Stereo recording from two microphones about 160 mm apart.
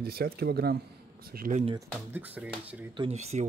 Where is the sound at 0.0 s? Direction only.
75° right (ahead or behind).